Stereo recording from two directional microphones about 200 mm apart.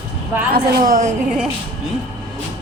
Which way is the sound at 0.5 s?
45° right (ahead or behind).